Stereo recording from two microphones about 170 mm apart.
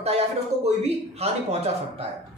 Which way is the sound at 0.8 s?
40° right (ahead or behind).